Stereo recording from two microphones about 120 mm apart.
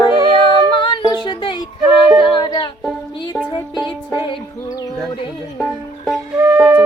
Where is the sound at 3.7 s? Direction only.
40° left (ahead or behind).